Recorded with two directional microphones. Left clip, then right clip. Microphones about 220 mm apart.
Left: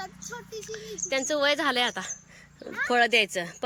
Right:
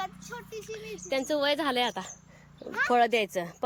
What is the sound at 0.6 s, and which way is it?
A woman's voice, 10° right (ahead or behind).